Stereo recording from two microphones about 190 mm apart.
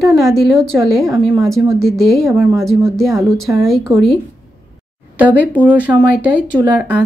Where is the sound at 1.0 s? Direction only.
15° right (ahead or behind).